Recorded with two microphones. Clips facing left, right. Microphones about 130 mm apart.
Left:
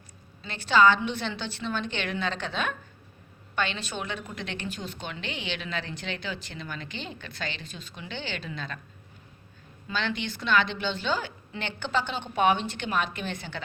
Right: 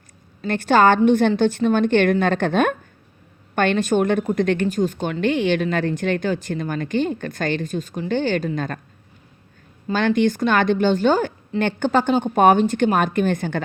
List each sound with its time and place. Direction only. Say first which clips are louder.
0.4 s speech: right 6 dB; 50° right (ahead or behind)
9.8 s speech: right 13 dB; 45° right (ahead or behind)